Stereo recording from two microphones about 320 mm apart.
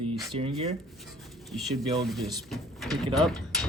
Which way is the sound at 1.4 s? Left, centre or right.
Centre.